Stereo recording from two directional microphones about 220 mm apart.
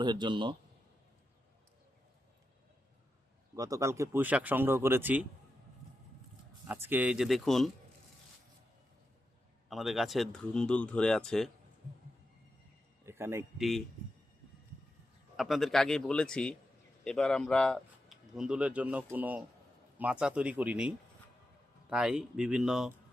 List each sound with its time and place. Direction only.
0.0 s a man's voice: 20° right (ahead or behind)
3.5 s speech: 15° right (ahead or behind)
6.7 s speech: 10° right (ahead or behind)
9.6 s speech: centre (ahead or behind)
13.1 s a man's voice: 10° right (ahead or behind)
15.4 s speech: centre (ahead or behind)